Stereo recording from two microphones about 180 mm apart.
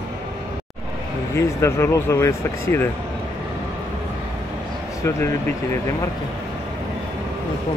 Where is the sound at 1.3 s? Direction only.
15° left (ahead or behind).